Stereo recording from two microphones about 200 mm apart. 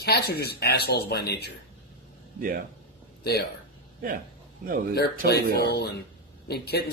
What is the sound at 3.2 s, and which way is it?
Speech, 50° left (ahead or behind).